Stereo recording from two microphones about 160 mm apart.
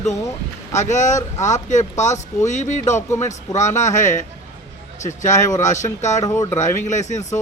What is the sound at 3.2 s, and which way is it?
Speech, 45° left (ahead or behind).